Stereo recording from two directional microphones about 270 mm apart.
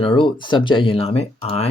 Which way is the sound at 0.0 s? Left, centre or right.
Centre.